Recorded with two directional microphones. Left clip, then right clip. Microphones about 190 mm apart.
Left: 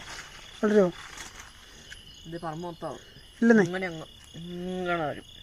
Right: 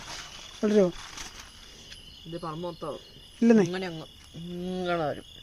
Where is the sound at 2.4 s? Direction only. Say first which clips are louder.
Even; 45° left (ahead or behind).